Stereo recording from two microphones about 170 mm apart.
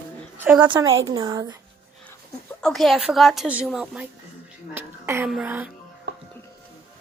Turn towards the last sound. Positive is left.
turn(degrees=-80)